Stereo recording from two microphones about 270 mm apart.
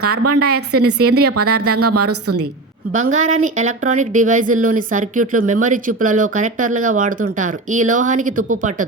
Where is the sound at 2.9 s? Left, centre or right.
Right.